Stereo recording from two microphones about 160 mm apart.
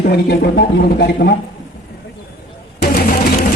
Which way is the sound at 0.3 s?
90° left.